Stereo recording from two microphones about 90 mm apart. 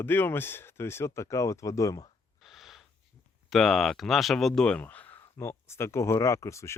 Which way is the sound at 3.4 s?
5° left (ahead or behind).